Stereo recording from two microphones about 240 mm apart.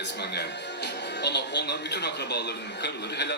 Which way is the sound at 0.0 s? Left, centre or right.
Left.